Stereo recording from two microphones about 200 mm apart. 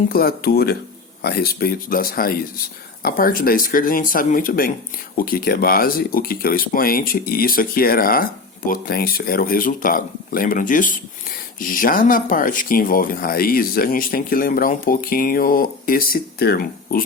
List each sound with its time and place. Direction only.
0.1 s speech: 50° left (ahead or behind)